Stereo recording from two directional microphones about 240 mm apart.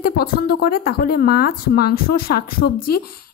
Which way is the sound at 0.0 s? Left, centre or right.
Left.